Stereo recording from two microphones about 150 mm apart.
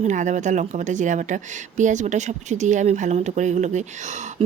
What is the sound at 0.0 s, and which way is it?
Speech, 55° right (ahead or behind).